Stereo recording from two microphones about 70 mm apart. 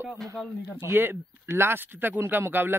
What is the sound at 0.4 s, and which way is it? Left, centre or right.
Speech, centre.